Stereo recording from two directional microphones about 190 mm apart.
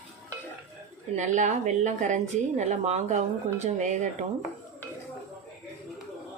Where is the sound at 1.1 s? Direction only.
40° right (ahead or behind).